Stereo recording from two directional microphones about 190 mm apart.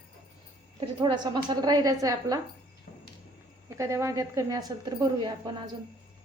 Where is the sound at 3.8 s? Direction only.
15° right (ahead or behind).